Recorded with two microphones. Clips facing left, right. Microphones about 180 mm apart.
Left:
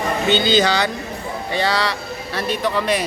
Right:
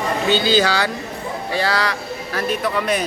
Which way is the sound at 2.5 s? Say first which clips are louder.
Left 1 dB; 30° left (ahead or behind).